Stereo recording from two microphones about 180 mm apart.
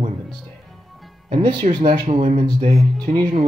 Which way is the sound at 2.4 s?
20° right (ahead or behind).